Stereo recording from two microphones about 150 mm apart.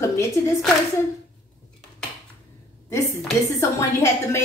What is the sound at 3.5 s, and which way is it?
Speech, 20° left (ahead or behind).